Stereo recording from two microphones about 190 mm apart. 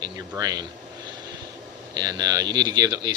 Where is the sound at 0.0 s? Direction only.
20° right (ahead or behind).